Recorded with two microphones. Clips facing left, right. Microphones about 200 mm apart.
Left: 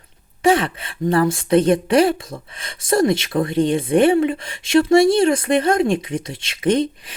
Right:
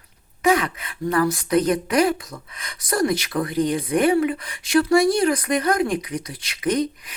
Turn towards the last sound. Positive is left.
turn(degrees=30)  # may be behind; listen again after turning